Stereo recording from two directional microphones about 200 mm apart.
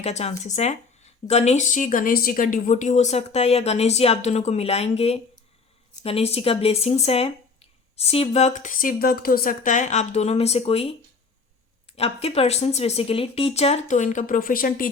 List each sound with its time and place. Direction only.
0.0 s speech: 35° left (ahead or behind)
11.9 s speech: 30° left (ahead or behind)